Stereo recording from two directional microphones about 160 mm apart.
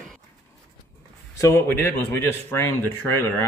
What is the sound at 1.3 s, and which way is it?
A man's voice, 15° left (ahead or behind).